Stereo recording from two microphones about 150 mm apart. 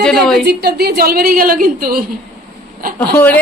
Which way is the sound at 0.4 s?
90° right.